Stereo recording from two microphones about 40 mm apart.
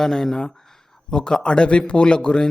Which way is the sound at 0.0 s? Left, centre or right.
Centre.